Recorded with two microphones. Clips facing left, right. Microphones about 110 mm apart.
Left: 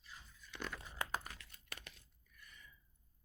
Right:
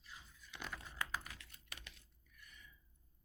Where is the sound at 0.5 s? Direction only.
10° right (ahead or behind).